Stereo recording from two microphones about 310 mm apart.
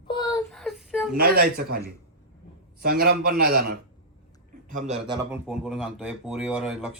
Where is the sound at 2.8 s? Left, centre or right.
Right.